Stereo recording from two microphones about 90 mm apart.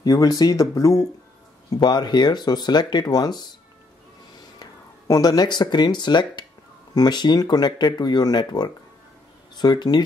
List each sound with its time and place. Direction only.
0.0 s speech: 45° left (ahead or behind)
1.7 s speech: 50° left (ahead or behind)
5.0 s speech: 40° left (ahead or behind)